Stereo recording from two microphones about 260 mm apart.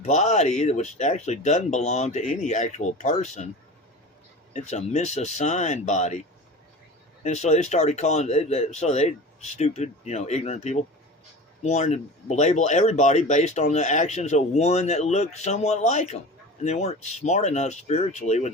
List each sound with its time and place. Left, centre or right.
0.0 s speech: left
4.5 s speech: left
7.2 s speech: left